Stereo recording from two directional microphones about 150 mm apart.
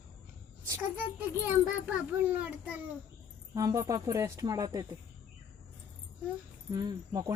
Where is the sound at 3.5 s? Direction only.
20° right (ahead or behind).